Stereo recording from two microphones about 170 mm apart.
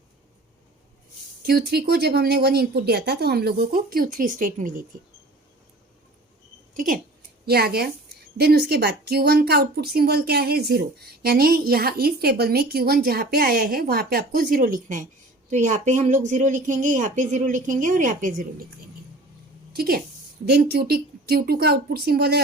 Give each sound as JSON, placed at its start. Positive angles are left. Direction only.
{"t": 1.5, "sound": "speech", "side_deg": -65}
{"t": 6.7, "sound": "speech", "side_deg": -55}
{"t": 7.4, "sound": "a woman's voice", "side_deg": -70}
{"t": 19.7, "sound": "a woman's voice", "side_deg": -65}